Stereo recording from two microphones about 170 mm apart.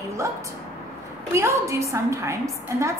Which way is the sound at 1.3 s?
15° right (ahead or behind).